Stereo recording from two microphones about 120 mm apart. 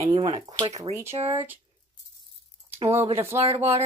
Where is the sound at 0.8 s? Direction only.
25° right (ahead or behind).